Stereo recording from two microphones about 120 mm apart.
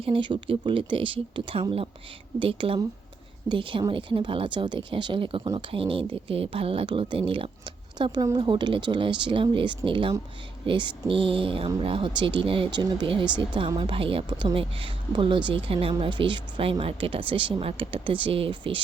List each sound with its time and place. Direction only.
0.0 s speech: 45° right (ahead or behind)